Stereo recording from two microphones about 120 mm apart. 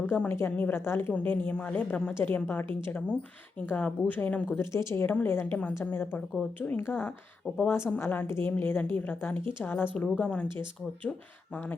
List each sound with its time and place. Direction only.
0.0 s a woman's voice: 15° left (ahead or behind)
3.7 s a woman's voice: 15° left (ahead or behind)